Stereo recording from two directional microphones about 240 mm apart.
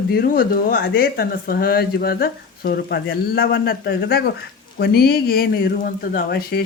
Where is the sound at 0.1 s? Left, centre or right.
Left.